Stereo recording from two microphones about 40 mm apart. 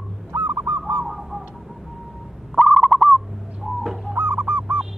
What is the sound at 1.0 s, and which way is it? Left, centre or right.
Bird, centre.